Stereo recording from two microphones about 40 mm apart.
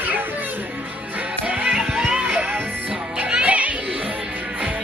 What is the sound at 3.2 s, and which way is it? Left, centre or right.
Music, right.